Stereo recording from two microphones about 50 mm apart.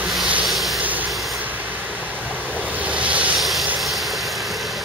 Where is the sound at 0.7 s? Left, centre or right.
Right.